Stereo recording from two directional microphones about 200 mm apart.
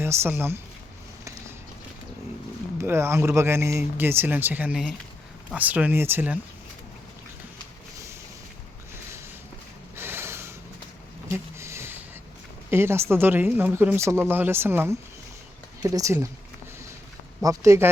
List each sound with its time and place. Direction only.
0.0 s speech: 10° right (ahead or behind)
2.7 s speech: 10° right (ahead or behind)
9.9 s a sound: 10° right (ahead or behind)
12.7 s speech: 10° right (ahead or behind)
17.4 s speech: 15° right (ahead or behind)